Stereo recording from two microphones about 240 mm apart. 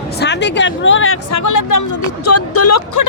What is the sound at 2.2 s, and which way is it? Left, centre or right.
Speech, left.